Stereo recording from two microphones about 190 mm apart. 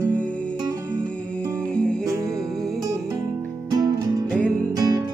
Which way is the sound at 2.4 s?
Centre (ahead or behind).